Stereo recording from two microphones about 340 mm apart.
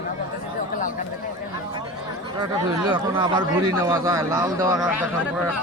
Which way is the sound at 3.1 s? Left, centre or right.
Centre.